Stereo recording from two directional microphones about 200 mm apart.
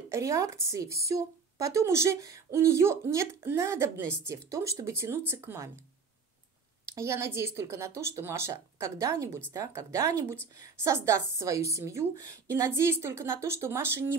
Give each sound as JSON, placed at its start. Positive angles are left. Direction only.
{"t": 0.1, "sound": "a woman's voice", "side_deg": -15}
{"t": 7.0, "sound": "a woman's voice", "side_deg": -15}